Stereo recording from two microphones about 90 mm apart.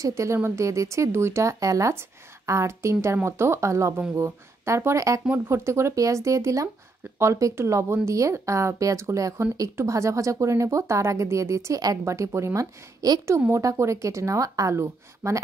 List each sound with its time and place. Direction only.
0.0 s speech: 35° right (ahead or behind)
13.0 s a woman's voice: 45° right (ahead or behind)
13.5 s speech: 35° right (ahead or behind)